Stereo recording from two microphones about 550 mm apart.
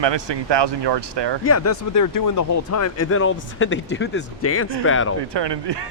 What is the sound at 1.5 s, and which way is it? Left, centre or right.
Speech, left.